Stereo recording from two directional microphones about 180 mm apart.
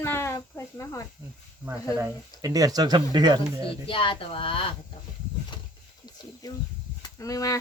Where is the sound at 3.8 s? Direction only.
30° left (ahead or behind).